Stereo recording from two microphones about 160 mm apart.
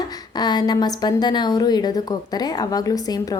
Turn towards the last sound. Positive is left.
turn(degrees=20)  # may be behind; listen again after turning